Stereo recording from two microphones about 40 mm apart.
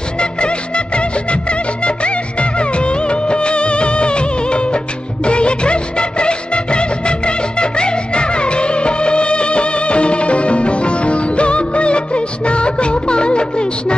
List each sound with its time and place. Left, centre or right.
0.2 s music of bollywood: left